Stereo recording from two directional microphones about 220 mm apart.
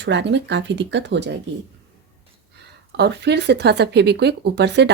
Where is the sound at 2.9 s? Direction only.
50° right (ahead or behind).